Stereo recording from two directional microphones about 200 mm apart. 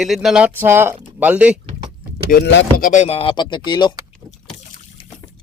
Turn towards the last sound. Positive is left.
turn(degrees=20)  # may be behind; listen again after turning